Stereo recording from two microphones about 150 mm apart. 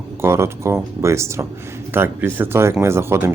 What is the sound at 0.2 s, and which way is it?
Speech, 20° right (ahead or behind).